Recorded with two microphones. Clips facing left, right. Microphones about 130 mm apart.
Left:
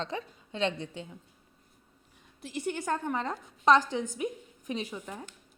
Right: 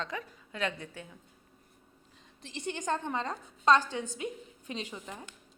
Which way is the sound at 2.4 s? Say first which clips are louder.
Left 3 dB; 10° left (ahead or behind).